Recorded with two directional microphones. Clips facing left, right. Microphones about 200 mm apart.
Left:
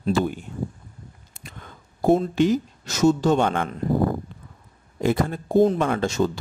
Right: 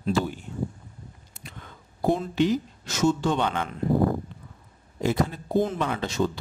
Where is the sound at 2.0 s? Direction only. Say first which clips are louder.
Left 5 dB; 45° left (ahead or behind).